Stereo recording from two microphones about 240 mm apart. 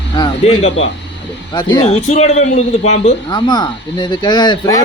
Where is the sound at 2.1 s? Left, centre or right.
Left.